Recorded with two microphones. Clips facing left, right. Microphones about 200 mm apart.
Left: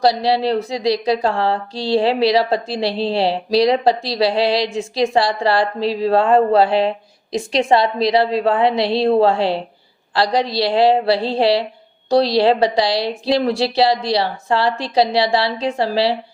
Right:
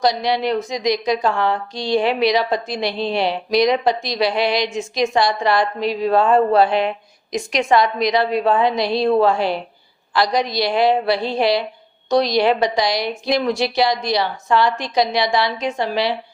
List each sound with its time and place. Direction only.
0.0 s a woman's voice: 30° left (ahead or behind)